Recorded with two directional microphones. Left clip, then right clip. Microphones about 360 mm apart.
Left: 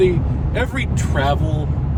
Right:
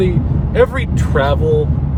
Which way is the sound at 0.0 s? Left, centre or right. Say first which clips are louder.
Left 1 dB; centre.